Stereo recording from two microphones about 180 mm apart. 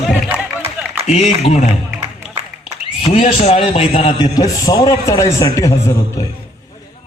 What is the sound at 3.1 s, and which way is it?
A man's voice, 30° left (ahead or behind).